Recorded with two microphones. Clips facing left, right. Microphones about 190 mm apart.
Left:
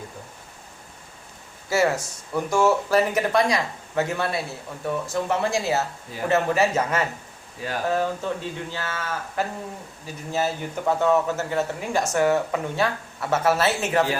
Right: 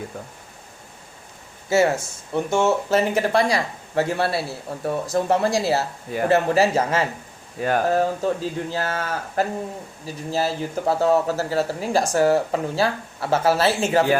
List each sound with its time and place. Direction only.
1.7 s speech: 25° right (ahead or behind)
7.6 s speech: 55° right (ahead or behind)
7.9 s speech: 35° right (ahead or behind)